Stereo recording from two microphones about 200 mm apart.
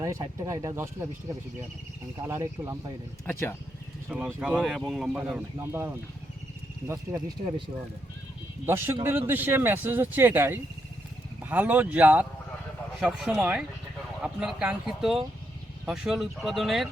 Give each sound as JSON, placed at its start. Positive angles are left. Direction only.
{"t": 0.0, "sound": "speech", "side_deg": -15}
{"t": 2.2, "sound": "speech", "side_deg": -15}
{"t": 4.1, "sound": "speech", "side_deg": -5}
{"t": 5.2, "sound": "speech", "side_deg": -10}
{"t": 8.6, "sound": "speech", "side_deg": -10}